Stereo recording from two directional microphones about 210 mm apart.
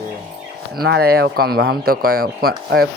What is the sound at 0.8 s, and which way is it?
Speech, 50° right (ahead or behind).